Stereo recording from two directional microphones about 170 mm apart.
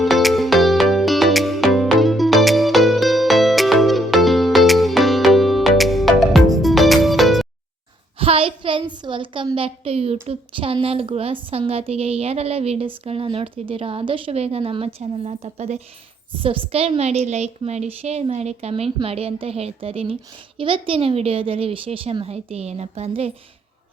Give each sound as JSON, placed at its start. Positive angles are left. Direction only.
{"t": 0.0, "sound": "music", "side_deg": 0}
{"t": 8.2, "sound": "a child's voice", "side_deg": -35}
{"t": 16.4, "sound": "a woman's voice", "side_deg": -30}